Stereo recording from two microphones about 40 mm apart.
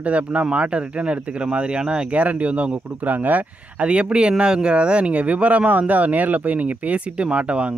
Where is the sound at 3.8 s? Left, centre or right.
Right.